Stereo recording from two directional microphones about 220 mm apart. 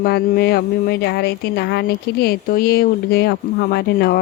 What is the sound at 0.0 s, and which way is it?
Speech, 45° left (ahead or behind).